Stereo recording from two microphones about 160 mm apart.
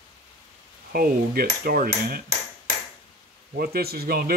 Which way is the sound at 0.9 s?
70° right (ahead or behind).